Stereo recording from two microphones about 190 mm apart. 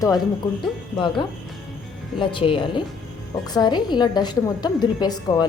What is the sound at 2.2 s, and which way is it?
A woman's voice, 25° left (ahead or behind).